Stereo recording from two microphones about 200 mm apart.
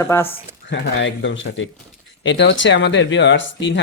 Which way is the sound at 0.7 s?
65° left (ahead or behind).